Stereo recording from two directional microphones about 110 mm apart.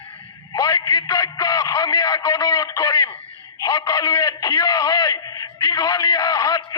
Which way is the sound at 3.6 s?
30° left (ahead or behind).